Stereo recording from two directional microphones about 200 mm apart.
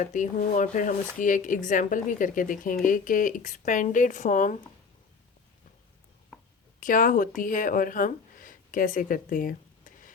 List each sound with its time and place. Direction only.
0.0 s speech: 40° left (ahead or behind)
6.7 s speech: 40° left (ahead or behind)